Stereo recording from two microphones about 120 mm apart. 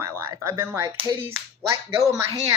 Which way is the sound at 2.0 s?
25° right (ahead or behind).